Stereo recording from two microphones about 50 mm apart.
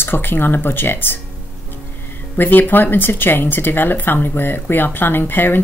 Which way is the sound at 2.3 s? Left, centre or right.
Left.